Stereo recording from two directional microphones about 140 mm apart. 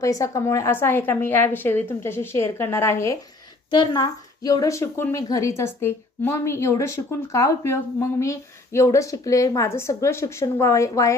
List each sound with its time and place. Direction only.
0.0 s a woman's voice: 25° left (ahead or behind)
3.7 s a woman's voice: 30° left (ahead or behind)